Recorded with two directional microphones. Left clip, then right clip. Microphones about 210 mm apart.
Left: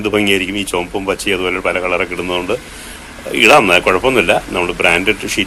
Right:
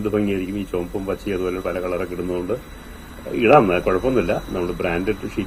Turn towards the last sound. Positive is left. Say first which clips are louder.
# left 9 dB
turn(degrees=40)  # may be behind; listen again after turning